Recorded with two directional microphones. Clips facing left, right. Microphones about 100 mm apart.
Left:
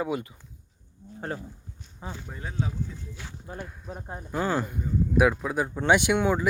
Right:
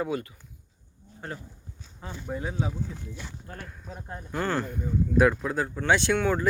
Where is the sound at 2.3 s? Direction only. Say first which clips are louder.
Right 4 dB; 10° right (ahead or behind).